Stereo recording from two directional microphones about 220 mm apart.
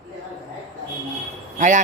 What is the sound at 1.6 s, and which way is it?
Speech, 35° right (ahead or behind).